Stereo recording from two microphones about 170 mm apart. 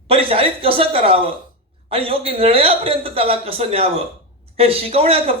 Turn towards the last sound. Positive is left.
turn(degrees=-35)  # may be behind; listen again after turning